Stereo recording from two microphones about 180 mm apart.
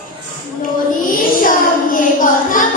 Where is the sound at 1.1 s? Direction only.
50° left (ahead or behind).